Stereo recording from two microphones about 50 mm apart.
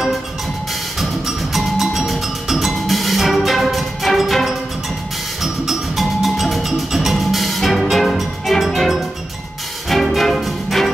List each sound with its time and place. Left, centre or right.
0.9 s music: centre